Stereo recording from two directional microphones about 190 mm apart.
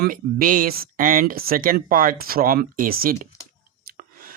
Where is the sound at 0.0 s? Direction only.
50° right (ahead or behind).